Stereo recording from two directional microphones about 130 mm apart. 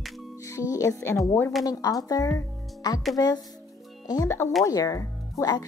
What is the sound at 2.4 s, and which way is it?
Music, 30° left (ahead or behind).